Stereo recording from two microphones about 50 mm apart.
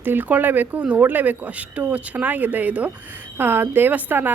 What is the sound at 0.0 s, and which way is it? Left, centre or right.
Speech, right.